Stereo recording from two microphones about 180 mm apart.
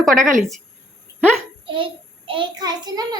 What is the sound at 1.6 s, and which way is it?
A child's voice, 30° right (ahead or behind).